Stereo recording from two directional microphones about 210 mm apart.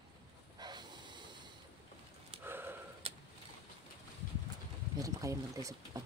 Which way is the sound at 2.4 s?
10° right (ahead or behind).